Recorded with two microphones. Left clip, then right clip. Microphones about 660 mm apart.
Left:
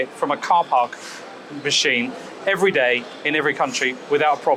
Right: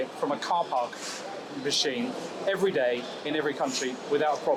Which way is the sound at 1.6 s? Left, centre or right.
Left.